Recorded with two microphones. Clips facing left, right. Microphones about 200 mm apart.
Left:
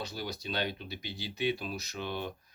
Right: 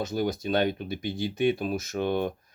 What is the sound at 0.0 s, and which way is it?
Speech, 50° right (ahead or behind).